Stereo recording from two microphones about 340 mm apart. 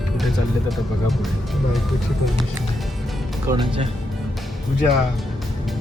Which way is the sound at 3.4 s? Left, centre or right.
Centre.